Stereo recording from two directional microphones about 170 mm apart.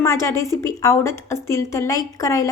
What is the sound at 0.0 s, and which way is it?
A woman's voice, 15° left (ahead or behind).